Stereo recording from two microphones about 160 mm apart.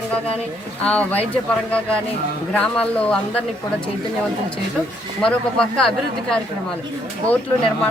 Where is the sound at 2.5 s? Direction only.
5° left (ahead or behind).